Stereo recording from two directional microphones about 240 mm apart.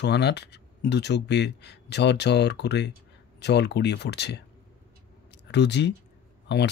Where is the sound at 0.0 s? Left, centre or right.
Left.